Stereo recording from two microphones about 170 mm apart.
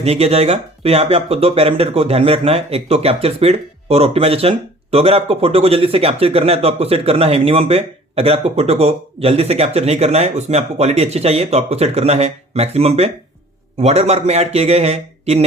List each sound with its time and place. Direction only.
0.0 s speech: 35° right (ahead or behind)